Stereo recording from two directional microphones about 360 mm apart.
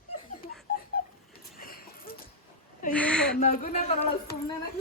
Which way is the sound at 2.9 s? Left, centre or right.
Centre.